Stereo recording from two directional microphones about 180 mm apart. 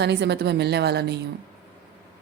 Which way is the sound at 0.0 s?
70° right (ahead or behind).